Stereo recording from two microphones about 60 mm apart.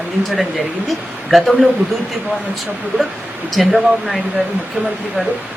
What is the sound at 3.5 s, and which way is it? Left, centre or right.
Speech, centre.